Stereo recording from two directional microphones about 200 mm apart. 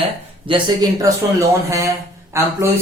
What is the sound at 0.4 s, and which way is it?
Speech, 20° right (ahead or behind).